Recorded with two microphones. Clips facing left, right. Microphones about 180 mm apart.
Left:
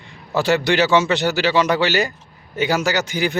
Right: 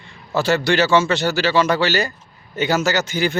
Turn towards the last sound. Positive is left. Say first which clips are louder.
# right 1 dB
turn(degrees=15)  # may be behind; listen again after turning